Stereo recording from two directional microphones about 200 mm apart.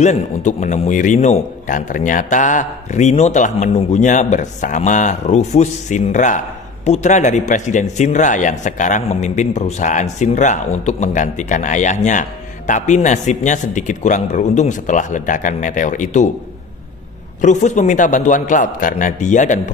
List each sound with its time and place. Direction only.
0.0 s a man's voice: 35° left (ahead or behind)
17.4 s a man's voice: 35° left (ahead or behind)